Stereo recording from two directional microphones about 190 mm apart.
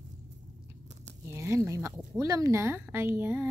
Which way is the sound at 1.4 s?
15° right (ahead or behind).